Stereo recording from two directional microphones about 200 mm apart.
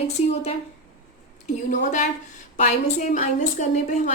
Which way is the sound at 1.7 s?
40° left (ahead or behind).